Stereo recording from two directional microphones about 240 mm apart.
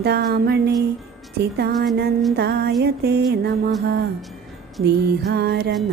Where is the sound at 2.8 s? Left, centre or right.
Right.